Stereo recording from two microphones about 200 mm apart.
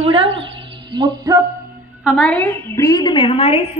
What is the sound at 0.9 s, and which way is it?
Speech, 20° right (ahead or behind).